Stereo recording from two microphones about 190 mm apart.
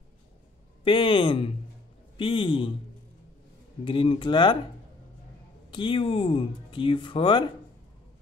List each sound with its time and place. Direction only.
0.8 s speech: 25° left (ahead or behind)
3.8 s speech: 25° left (ahead or behind)
5.7 s speech: 25° left (ahead or behind)